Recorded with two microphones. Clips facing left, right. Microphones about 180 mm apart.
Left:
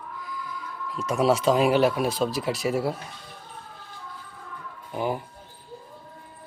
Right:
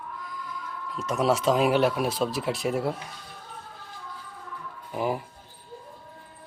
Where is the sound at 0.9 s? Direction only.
Centre (ahead or behind).